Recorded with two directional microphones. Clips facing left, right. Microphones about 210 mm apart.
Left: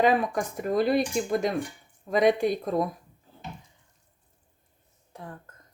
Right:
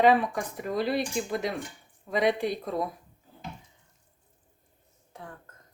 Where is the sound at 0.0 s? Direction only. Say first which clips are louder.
Right 1 dB; 45° left (ahead or behind).